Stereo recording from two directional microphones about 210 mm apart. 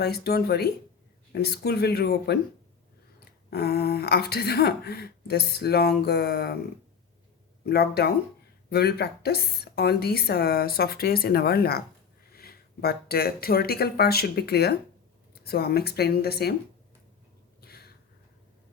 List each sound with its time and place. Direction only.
0.0 s speech: 50° left (ahead or behind)
7.6 s speech: 50° left (ahead or behind)
17.6 s a sound: 50° left (ahead or behind)